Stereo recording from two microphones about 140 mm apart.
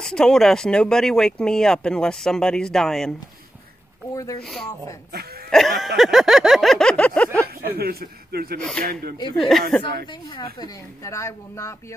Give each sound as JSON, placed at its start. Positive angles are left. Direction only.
{"t": 0.0, "sound": "speech", "side_deg": 5}
{"t": 4.1, "sound": "speech", "side_deg": 25}
{"t": 4.4, "sound": "speech", "side_deg": 5}
{"t": 7.6, "sound": "a man's voice", "side_deg": -90}
{"t": 9.4, "sound": "speech", "side_deg": 0}
{"t": 11.1, "sound": "speech", "side_deg": 20}